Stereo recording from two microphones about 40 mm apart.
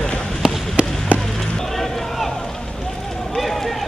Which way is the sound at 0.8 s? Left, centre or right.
Right.